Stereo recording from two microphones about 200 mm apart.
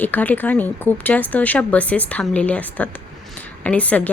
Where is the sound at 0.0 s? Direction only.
10° left (ahead or behind).